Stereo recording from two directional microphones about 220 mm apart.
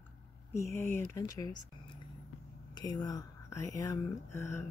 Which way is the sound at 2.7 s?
15° left (ahead or behind).